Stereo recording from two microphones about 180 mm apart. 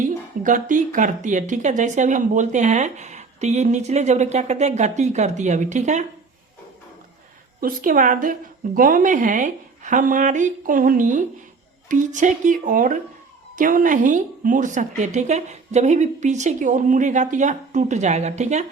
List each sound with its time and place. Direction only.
0.0 s speech: 45° right (ahead or behind)
7.6 s a woman's voice: 50° right (ahead or behind)